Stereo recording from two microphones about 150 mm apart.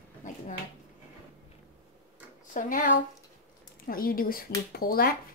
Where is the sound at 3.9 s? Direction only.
75° left (ahead or behind).